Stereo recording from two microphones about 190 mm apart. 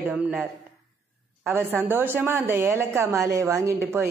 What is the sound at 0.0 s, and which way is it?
A woman's voice, 5° right (ahead or behind).